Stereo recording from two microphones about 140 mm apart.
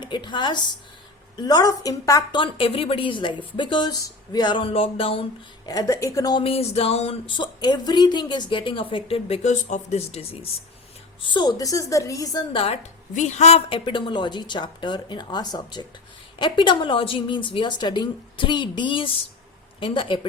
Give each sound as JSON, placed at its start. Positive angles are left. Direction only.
{"t": 0.0, "sound": "a woman's voice", "side_deg": 35}
{"t": 2.4, "sound": "speech", "side_deg": 40}
{"t": 5.6, "sound": "a woman's voice", "side_deg": 25}
{"t": 6.4, "sound": "speech", "side_deg": 45}
{"t": 11.2, "sound": "a woman's voice", "side_deg": 30}
{"t": 12.5, "sound": "a woman's voice", "side_deg": 45}
{"t": 13.1, "sound": "speech", "side_deg": 55}